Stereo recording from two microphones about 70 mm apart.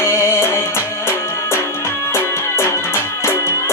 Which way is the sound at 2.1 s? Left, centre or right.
Left.